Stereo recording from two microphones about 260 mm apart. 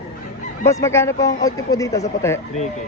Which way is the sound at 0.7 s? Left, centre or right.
Centre.